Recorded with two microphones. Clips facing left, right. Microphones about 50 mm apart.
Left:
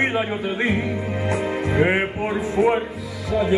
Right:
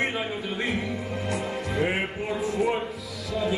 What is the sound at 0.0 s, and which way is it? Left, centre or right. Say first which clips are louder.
Speech: left 6 dB; left.